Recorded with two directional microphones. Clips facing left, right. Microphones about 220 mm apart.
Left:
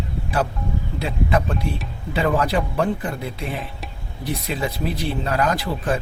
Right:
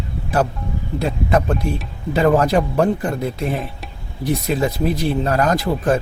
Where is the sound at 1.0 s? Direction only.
45° right (ahead or behind).